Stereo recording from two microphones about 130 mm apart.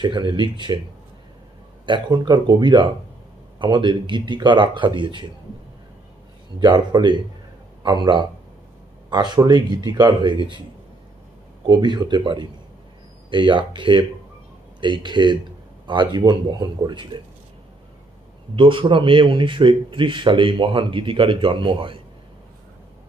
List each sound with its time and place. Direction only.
0.0 s speech: 35° right (ahead or behind)
1.9 s speech: 35° right (ahead or behind)
6.6 s speech: 35° right (ahead or behind)
11.6 s speech: 35° right (ahead or behind)
18.6 s speech: 40° right (ahead or behind)